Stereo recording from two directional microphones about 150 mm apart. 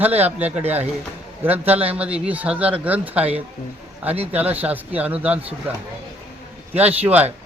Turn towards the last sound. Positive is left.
turn(degrees=-10)  # may be behind; listen again after turning